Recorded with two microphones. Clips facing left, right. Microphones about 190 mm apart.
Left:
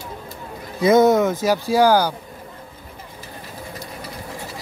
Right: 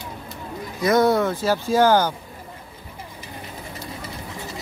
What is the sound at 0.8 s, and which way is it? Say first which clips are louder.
Speech: left 4 dB; 20° left (ahead or behind).